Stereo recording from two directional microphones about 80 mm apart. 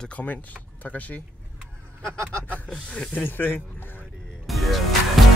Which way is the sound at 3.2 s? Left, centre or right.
Left.